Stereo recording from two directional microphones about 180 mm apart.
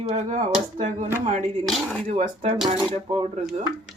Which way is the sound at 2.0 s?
30° right (ahead or behind).